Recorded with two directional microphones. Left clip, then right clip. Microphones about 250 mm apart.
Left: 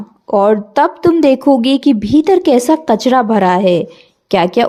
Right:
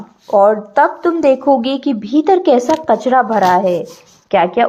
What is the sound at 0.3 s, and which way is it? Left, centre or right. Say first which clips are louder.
A woman's voice: right 1 dB; left.